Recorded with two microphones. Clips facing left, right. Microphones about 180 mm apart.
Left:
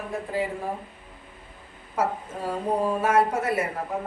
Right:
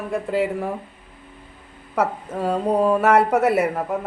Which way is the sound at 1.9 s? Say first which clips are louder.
Right 4 dB; 70° right (ahead or behind).